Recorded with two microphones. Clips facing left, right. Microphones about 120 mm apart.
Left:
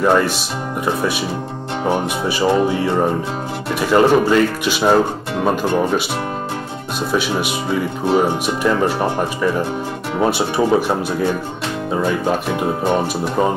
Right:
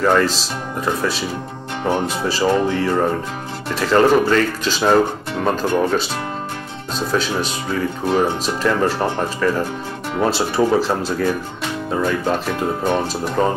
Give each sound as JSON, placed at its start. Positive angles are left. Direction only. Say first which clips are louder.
{"t": 0.0, "sound": "speech", "louder": "left 1 dB", "side_deg": 15}